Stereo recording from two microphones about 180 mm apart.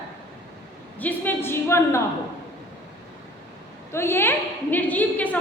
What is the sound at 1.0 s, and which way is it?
A woman's voice, 10° left (ahead or behind).